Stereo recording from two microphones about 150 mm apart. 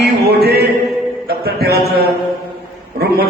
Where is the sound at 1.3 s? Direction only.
90° right.